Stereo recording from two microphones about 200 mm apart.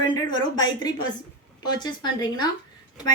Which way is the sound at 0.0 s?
20° left (ahead or behind).